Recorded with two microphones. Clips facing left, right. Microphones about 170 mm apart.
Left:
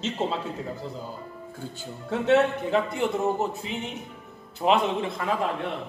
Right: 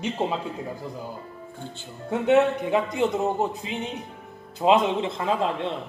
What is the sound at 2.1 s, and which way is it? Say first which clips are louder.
A man's voice: right 2 dB; 15° right (ahead or behind).